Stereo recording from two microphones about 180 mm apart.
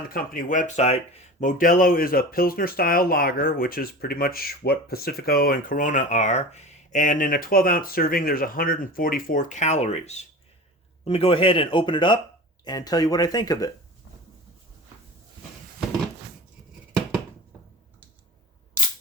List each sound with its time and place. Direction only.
0.1 s speech: 50° left (ahead or behind); by 13.7 s 20° left (ahead or behind)